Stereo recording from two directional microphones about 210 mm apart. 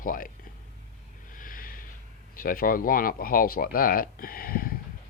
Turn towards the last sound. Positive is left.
turn(degrees=45)  # may be behind; listen again after turning